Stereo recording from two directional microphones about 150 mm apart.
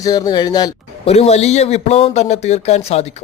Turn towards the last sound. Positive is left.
turn(degrees=45)  # may be behind; listen again after turning